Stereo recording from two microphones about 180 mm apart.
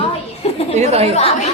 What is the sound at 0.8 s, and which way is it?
Speech, 40° right (ahead or behind).